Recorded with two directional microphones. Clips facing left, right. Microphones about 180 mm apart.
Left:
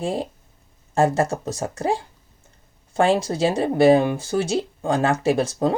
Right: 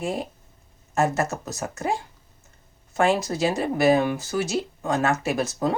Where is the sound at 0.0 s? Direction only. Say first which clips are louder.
Left 3 dB; 30° left (ahead or behind).